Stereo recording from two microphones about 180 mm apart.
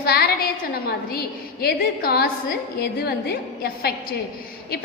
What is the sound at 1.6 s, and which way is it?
A woman's voice, 60° left (ahead or behind).